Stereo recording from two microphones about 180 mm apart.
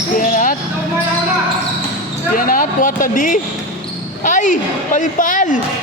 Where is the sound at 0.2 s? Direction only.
50° left (ahead or behind).